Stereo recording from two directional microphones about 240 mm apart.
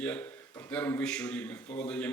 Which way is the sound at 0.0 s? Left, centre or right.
Centre.